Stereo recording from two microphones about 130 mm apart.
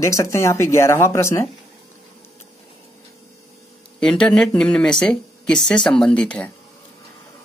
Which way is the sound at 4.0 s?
5° left (ahead or behind).